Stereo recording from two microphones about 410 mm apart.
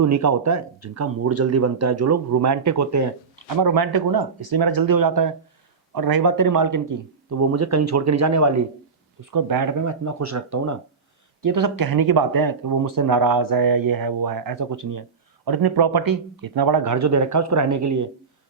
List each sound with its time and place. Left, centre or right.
0.0 s speech: right
3.6 s speech: right
9.3 s speech: right
15.4 s speech: right